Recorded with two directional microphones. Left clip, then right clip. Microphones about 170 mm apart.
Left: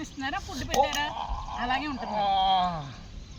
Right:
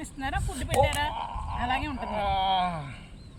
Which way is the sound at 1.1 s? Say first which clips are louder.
Even; centre (ahead or behind).